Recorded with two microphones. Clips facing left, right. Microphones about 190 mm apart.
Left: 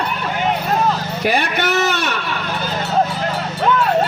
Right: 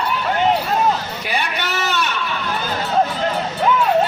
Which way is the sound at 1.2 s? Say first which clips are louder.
Left 6 dB; 50° left (ahead or behind).